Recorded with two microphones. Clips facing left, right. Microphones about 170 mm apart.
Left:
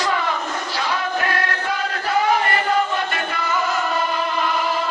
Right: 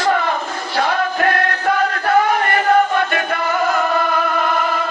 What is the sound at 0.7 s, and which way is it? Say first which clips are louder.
Music: right 7 dB; 55° right (ahead or behind).